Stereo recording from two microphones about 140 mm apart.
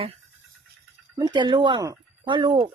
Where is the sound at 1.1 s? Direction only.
30° right (ahead or behind).